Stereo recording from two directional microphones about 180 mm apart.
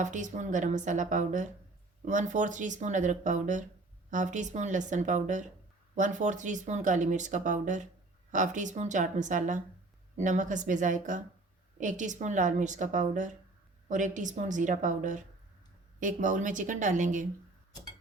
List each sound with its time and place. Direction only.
0.0 s speech: 45° right (ahead or behind)